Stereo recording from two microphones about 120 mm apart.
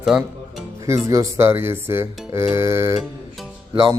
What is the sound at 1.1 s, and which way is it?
Speech, 25° right (ahead or behind).